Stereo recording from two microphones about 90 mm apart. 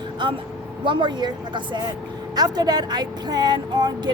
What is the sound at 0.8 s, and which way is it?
A woman's voice, 60° right (ahead or behind).